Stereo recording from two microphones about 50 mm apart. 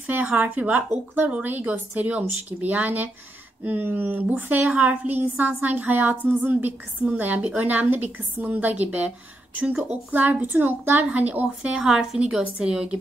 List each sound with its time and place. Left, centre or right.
0.0 s a woman's voice: right
10.5 s a woman's voice: right
11.1 s a woman's voice: right
11.4 s a woman's voice: centre
12.5 s a woman's voice: centre